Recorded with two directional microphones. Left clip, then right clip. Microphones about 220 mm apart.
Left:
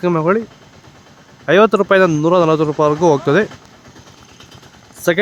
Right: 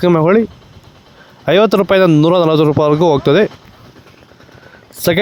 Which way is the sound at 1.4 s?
35° right (ahead or behind).